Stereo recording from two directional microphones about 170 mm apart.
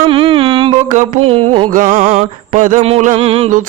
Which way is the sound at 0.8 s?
45° right (ahead or behind).